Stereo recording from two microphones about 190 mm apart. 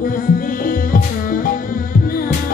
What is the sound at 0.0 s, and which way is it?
Music, 45° left (ahead or behind).